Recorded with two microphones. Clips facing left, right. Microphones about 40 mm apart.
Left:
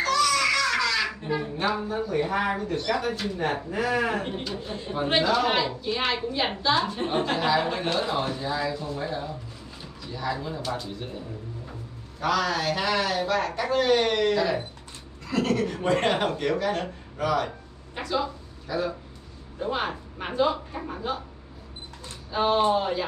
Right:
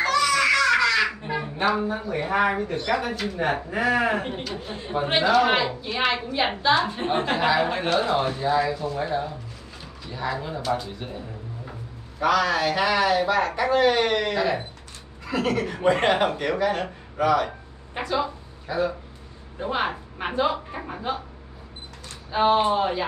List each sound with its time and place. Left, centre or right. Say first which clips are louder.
0.0 s babbling: right 2 dB; centre
1.8 s a man's voice: even; centre
4.4 s speech: right 1 dB; centre
4.6 s a man's voice: right 2 dB; centre
10.7 s a man's voice: right 9 dB; centre
12.2 s a man's voice: right 4 dB; centre
22.3 s speech: right 2 dB; centre